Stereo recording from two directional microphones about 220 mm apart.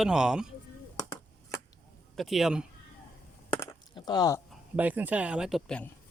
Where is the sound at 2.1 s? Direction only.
Centre (ahead or behind).